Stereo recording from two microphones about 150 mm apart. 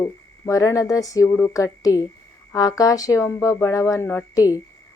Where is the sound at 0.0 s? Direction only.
20° left (ahead or behind).